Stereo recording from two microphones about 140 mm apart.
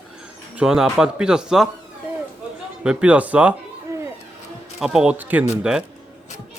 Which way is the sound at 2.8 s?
5° right (ahead or behind).